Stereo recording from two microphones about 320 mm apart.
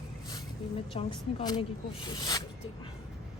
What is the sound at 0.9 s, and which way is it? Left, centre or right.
A woman's voice, centre.